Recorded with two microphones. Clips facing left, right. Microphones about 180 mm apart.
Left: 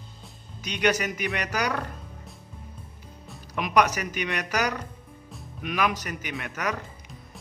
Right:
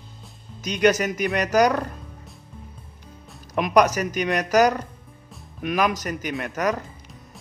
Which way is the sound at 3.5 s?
45° right (ahead or behind).